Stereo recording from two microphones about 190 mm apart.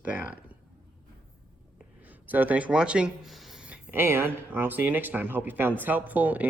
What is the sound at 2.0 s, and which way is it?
Speech, 10° right (ahead or behind).